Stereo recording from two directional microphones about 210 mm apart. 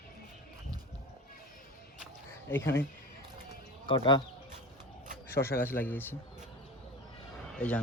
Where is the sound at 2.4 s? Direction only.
10° left (ahead or behind).